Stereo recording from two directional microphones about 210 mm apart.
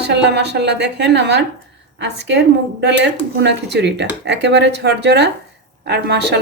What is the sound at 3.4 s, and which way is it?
A woman's voice, 55° right (ahead or behind).